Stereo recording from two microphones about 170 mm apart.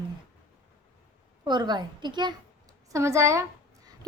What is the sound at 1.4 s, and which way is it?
A woman's voice, 25° right (ahead or behind).